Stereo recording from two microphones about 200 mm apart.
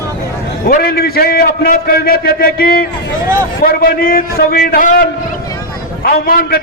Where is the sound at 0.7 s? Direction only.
50° left (ahead or behind).